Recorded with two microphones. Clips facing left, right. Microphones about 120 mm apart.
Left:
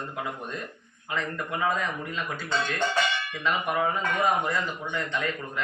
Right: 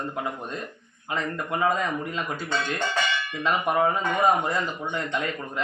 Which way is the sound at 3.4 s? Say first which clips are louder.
Right 3 dB; 35° right (ahead or behind).